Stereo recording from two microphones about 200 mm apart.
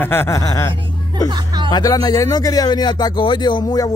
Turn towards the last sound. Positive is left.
turn(degrees=20)  # may be behind; listen again after turning